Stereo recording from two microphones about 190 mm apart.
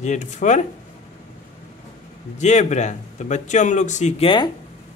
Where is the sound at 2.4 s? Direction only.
40° left (ahead or behind).